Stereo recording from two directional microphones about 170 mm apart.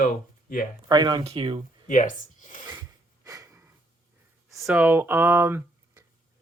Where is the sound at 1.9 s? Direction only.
45° left (ahead or behind).